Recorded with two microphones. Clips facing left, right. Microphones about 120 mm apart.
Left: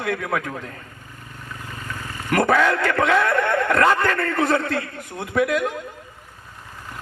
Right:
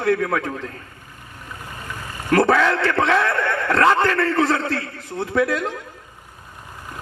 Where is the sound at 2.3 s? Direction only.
30° right (ahead or behind).